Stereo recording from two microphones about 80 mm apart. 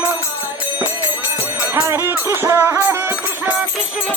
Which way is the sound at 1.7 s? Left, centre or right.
Right.